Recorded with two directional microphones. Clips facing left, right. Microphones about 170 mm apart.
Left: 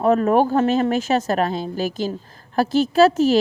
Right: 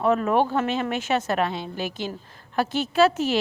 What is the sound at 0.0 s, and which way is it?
Speech, 40° left (ahead or behind).